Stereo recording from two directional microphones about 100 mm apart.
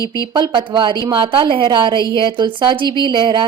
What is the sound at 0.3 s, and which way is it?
Speech, 45° right (ahead or behind).